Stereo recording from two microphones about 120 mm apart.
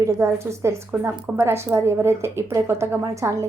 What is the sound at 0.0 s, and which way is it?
A woman's voice, 25° right (ahead or behind).